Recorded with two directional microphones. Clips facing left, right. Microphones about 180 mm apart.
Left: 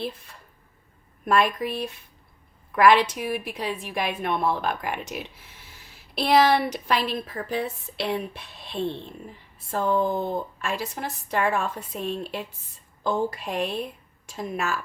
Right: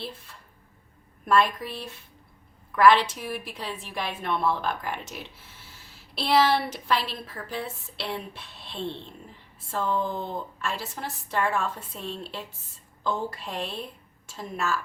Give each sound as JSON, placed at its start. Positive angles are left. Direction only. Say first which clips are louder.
{"t": 1.2, "sound": "a woman's voice", "louder": "left 1 dB", "side_deg": 15}